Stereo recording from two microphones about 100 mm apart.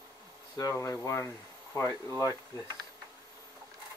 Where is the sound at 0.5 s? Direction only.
35° left (ahead or behind).